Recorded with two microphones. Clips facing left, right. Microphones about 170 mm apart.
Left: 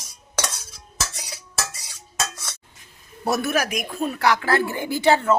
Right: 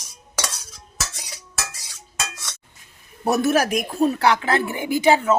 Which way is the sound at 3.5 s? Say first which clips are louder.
Right 4 dB; 45° right (ahead or behind).